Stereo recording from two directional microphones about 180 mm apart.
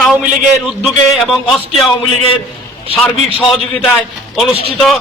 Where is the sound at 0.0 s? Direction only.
5° right (ahead or behind).